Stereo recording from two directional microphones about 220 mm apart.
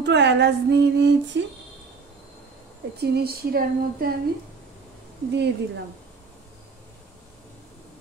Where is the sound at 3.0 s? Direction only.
45° right (ahead or behind).